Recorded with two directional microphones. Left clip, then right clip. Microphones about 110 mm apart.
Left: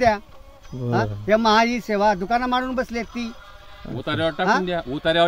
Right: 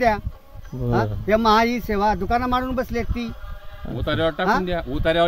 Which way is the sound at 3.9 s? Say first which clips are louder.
Right 1 dB; 25° right (ahead or behind).